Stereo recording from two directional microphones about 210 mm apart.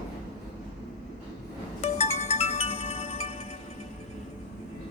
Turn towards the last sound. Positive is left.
turn(degrees=30)  # may be behind; listen again after turning